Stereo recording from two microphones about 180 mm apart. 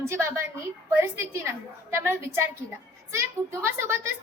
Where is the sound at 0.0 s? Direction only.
15° right (ahead or behind).